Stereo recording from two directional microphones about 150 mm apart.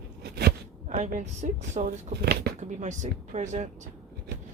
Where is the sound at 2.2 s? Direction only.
90° right.